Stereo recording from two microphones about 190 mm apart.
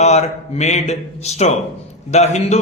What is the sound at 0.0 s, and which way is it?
A man's voice, 35° left (ahead or behind).